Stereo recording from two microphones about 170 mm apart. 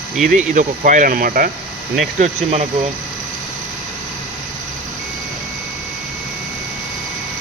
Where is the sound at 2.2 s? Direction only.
40° right (ahead or behind).